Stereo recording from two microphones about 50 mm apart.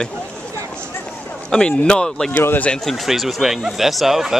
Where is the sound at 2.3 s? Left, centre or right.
Left.